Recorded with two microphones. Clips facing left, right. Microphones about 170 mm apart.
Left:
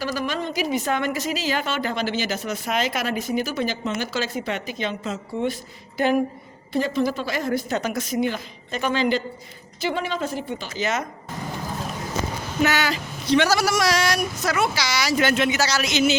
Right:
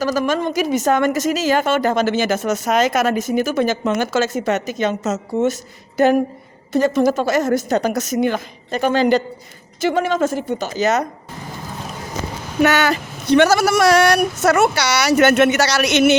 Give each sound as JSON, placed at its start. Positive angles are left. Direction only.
{"t": 0.0, "sound": "speech", "side_deg": -45}
{"t": 12.6, "sound": "a woman's voice", "side_deg": -55}